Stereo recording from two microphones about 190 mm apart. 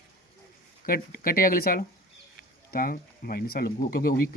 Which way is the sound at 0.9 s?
50° left (ahead or behind).